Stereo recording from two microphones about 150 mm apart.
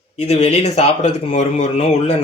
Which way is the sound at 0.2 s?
45° left (ahead or behind).